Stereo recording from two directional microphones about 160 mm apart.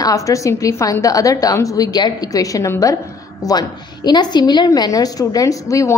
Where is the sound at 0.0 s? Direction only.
20° left (ahead or behind).